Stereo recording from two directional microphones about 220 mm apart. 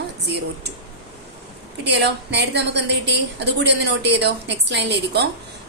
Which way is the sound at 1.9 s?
50° right (ahead or behind).